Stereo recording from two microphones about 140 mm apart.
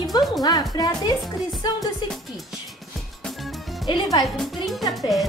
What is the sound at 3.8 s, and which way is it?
Speech, 30° left (ahead or behind).